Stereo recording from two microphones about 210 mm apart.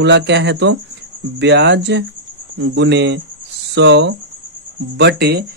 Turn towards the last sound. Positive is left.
turn(degrees=-50)  # may be behind; listen again after turning